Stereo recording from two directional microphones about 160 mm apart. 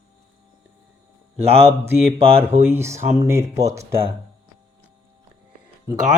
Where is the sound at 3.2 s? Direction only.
15° right (ahead or behind).